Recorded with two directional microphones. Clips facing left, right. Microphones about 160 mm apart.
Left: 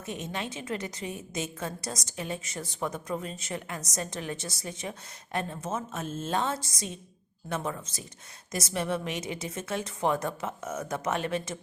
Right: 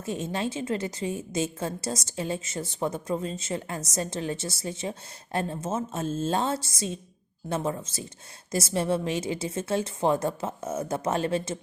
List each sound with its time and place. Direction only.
0.0 s a woman's voice: 30° right (ahead or behind)